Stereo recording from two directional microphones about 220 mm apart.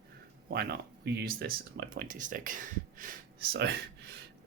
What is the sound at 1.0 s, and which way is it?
Speech, 45° right (ahead or behind).